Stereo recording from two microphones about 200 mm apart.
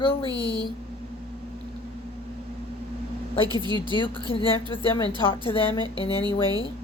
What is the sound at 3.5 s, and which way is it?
Speech, 20° right (ahead or behind).